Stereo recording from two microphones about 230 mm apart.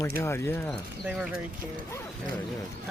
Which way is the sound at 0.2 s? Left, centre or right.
Centre.